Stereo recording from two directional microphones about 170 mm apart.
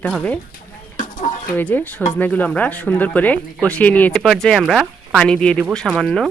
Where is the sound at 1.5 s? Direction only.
10° left (ahead or behind).